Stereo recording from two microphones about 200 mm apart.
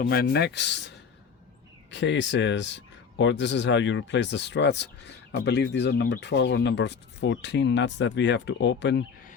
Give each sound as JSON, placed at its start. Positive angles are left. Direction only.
{"t": 0.0, "sound": "speech", "side_deg": 50}